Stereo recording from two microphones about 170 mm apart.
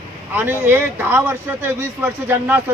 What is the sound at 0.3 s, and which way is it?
A man's voice, 10° right (ahead or behind).